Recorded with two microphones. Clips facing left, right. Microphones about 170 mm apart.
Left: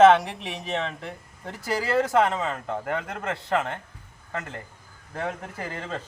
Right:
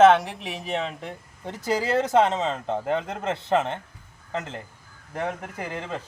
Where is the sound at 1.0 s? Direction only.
20° right (ahead or behind).